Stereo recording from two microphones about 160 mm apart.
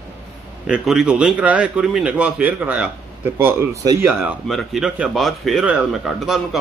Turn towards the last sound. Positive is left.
turn(degrees=0)  # may be behind; listen again after turning